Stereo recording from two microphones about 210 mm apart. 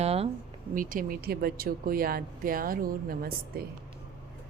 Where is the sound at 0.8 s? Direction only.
40° right (ahead or behind).